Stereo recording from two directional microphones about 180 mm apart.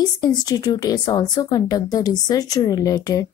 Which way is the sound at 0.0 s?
20° left (ahead or behind).